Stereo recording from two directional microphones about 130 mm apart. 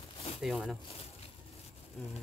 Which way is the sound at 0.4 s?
5° right (ahead or behind).